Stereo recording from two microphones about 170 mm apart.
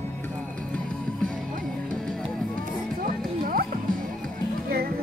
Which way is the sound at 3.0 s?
55° right (ahead or behind).